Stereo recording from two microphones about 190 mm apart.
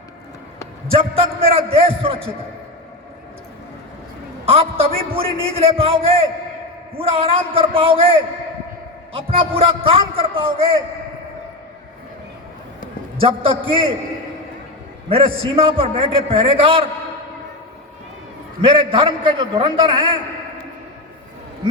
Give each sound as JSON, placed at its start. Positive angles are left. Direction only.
{"t": 0.9, "sound": "a man's voice", "side_deg": -30}
{"t": 4.4, "sound": "a man's voice", "side_deg": -30}
{"t": 13.1, "sound": "a man's voice", "side_deg": -30}
{"t": 15.1, "sound": "a man's voice", "side_deg": -30}
{"t": 18.6, "sound": "a man's voice", "side_deg": -25}